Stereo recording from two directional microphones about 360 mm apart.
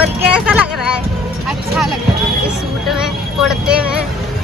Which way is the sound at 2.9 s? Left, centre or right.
Centre.